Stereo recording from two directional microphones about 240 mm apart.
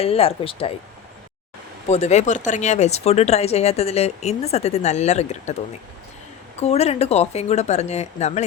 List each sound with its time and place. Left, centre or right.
0.0 s speech: left
1.9 s speech: left
6.6 s speech: left